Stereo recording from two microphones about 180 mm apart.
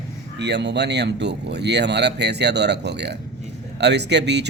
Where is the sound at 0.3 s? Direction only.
70° right (ahead or behind).